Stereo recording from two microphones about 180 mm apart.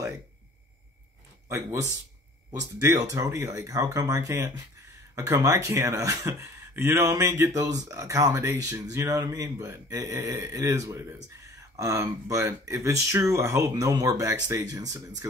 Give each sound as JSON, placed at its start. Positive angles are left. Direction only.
{"t": 1.5, "sound": "speech", "side_deg": -15}